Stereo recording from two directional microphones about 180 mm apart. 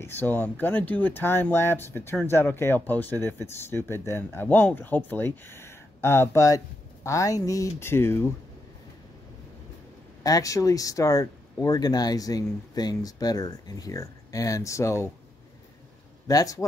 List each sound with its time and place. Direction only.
0.0 s speech: 10° left (ahead or behind)
10.2 s speech: 20° left (ahead or behind)
16.3 s speech: 20° left (ahead or behind)